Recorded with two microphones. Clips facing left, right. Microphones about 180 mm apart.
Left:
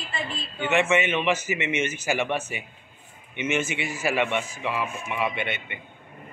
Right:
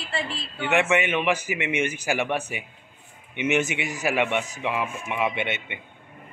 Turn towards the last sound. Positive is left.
turn(degrees=-20)  # may be behind; listen again after turning